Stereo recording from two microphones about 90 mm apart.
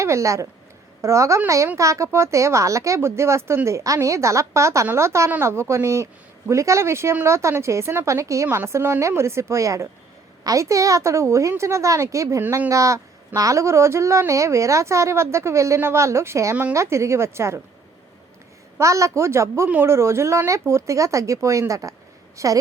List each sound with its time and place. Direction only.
0.0 s a woman's voice: 35° right (ahead or behind)
18.8 s speech: 35° right (ahead or behind)